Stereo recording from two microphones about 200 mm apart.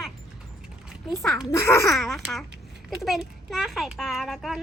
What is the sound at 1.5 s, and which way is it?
Speech, 15° left (ahead or behind).